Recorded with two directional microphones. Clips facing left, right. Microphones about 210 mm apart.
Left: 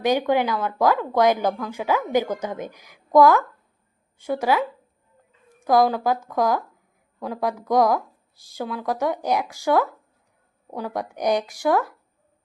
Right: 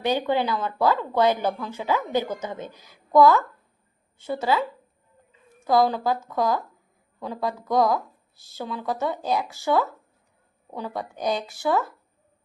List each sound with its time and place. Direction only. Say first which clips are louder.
0.0 s a woman's voice: left 3 dB; 15° left (ahead or behind)